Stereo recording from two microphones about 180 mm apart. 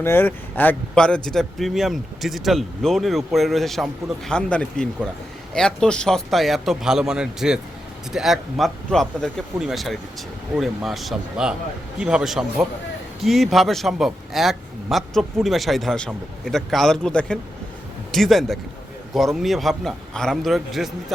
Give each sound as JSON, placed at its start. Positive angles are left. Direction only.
{"t": 0.0, "sound": "speech", "side_deg": 10}